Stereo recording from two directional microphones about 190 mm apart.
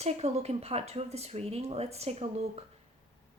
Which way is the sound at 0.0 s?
35° right (ahead or behind).